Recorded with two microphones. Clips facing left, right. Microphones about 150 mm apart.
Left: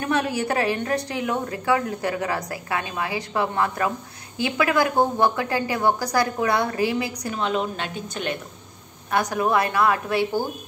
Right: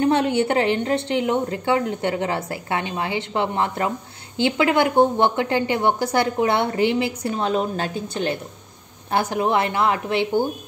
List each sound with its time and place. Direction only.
0.0 s a woman's voice: 25° right (ahead or behind)